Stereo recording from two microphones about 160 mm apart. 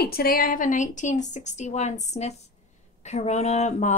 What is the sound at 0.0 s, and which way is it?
A woman's voice, 75° left (ahead or behind).